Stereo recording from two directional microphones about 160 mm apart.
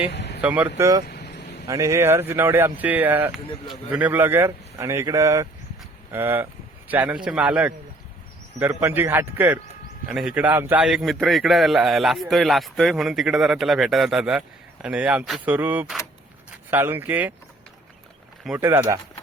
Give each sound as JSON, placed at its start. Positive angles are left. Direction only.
{"t": 0.1, "sound": "vehicle", "side_deg": 90}
{"t": 0.4, "sound": "speech", "side_deg": -10}
{"t": 0.8, "sound": "speech", "side_deg": -20}
{"t": 1.0, "sound": "vehicle", "side_deg": 90}
{"t": 1.6, "sound": "a man's voice", "side_deg": -20}
{"t": 18.6, "sound": "speech", "side_deg": -15}